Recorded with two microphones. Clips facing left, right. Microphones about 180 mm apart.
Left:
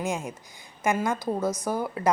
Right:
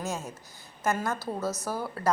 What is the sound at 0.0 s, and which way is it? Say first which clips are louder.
A woman's voice: left 4 dB; 15° left (ahead or behind).